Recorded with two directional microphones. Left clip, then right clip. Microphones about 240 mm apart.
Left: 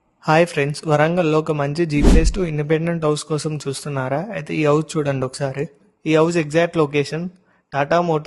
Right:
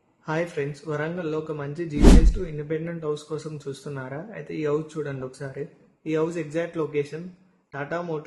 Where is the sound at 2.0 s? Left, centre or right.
Centre.